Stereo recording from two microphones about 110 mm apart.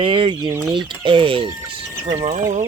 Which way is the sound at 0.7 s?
45° right (ahead or behind).